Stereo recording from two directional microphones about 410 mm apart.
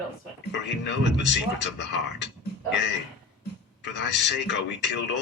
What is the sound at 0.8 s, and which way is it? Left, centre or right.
A man's voice, left.